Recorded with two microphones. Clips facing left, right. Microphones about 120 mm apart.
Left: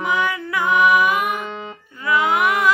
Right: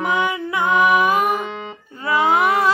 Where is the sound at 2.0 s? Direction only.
30° right (ahead or behind).